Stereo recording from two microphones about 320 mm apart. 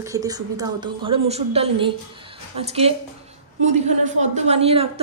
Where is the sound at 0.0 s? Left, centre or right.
Centre.